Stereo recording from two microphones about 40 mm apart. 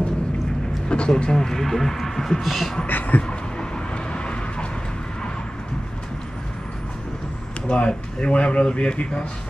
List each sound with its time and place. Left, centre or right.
0.8 s speech: left; by 2.3 s centre
2.4 s beatboxing: centre
2.9 s a sound: left
3.2 s vehicle: left
7.7 s speech: left